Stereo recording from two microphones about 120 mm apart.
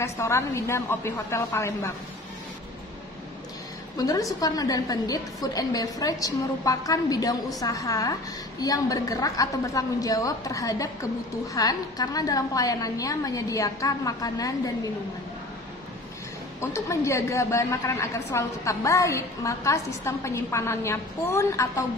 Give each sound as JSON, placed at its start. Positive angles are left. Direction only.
{"t": 0.0, "sound": "a woman's voice", "side_deg": 25}
{"t": 3.9, "sound": "a woman's voice", "side_deg": 30}
{"t": 16.7, "sound": "a woman's voice", "side_deg": 25}